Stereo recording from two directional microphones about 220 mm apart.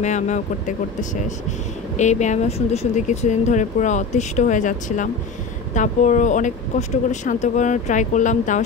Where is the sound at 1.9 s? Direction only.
30° left (ahead or behind).